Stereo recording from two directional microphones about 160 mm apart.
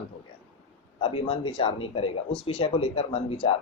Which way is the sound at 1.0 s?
35° left (ahead or behind).